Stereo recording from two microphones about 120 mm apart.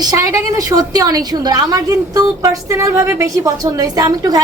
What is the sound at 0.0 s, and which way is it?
A woman's voice, 30° right (ahead or behind).